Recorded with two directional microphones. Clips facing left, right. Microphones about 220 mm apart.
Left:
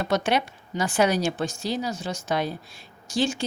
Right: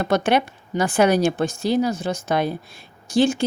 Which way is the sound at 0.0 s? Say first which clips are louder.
Right 5 dB; 55° right (ahead or behind).